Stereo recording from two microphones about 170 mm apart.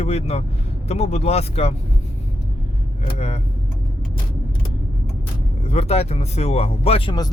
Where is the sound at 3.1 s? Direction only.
40° left (ahead or behind).